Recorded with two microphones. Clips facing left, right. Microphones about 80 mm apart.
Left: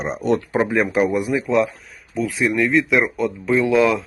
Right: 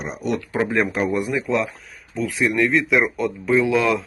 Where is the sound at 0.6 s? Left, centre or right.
Centre.